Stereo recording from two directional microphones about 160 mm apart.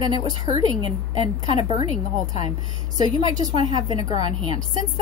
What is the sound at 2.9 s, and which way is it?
A woman's voice, 25° right (ahead or behind).